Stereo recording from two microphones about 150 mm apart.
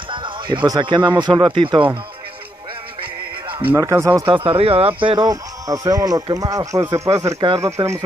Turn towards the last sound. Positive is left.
turn(degrees=-20)  # may be behind; listen again after turning